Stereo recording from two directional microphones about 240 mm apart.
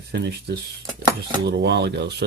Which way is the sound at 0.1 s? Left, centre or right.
Right.